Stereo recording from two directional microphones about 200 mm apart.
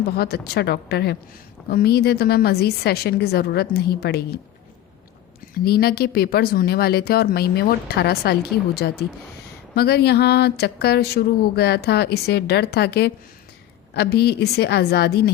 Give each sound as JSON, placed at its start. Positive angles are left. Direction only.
{"t": 0.2, "sound": "speech", "side_deg": 55}
{"t": 5.6, "sound": "a woman's voice", "side_deg": 50}